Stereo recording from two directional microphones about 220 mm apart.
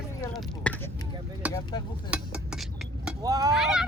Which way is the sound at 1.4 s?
5° right (ahead or behind).